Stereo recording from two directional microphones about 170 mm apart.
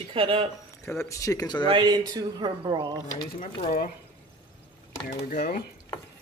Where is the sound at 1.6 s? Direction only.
25° right (ahead or behind).